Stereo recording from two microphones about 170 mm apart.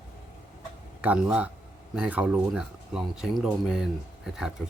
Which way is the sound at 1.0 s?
5° right (ahead or behind).